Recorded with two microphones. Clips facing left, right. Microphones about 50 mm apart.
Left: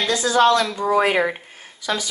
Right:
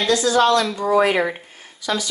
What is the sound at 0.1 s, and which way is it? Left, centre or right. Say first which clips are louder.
A woman's voice: even; left.